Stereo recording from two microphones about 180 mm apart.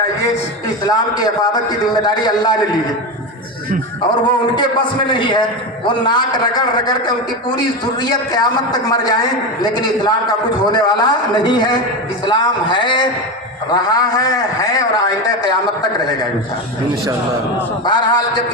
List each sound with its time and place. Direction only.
0.9 s a man's voice: 20° left (ahead or behind)
4.1 s a man's voice: 25° left (ahead or behind)
17.8 s a man's voice: 25° left (ahead or behind)